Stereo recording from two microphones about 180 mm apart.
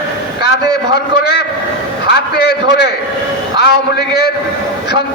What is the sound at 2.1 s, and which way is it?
Speech, 60° left (ahead or behind).